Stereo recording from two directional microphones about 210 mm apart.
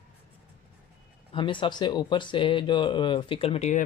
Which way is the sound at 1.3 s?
25° left (ahead or behind).